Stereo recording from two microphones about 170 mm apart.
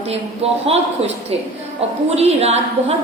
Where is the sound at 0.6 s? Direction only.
35° right (ahead or behind).